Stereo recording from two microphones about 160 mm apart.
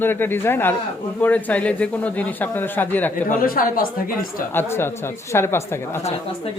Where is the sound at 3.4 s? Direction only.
65° left (ahead or behind).